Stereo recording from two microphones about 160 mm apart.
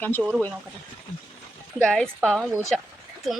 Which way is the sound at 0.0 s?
10° left (ahead or behind).